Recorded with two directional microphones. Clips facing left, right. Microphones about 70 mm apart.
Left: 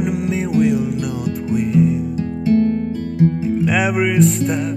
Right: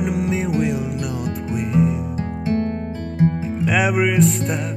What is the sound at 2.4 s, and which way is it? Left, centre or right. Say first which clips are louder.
Music: left 7 dB; right.